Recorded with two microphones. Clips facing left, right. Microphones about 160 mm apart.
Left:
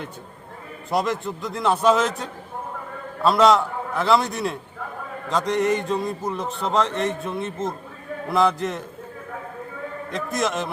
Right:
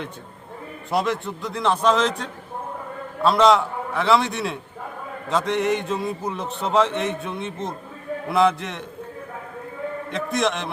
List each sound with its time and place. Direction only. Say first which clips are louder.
0.9 s a man's voice: even; centre (ahead or behind)
10.1 s a man's voice: right 1 dB; centre (ahead or behind)